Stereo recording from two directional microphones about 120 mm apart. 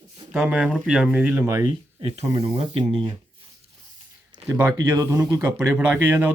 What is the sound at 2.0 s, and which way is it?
Speech, 50° right (ahead or behind).